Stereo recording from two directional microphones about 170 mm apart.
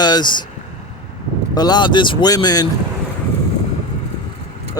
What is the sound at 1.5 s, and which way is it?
Speech, 25° left (ahead or behind).